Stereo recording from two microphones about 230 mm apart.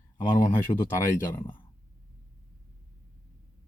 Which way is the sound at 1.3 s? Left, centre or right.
Centre.